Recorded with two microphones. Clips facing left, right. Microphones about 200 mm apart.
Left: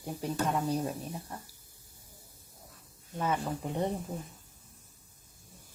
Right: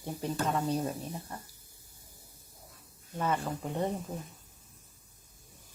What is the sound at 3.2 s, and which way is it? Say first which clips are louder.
Speech: even; 5° left (ahead or behind).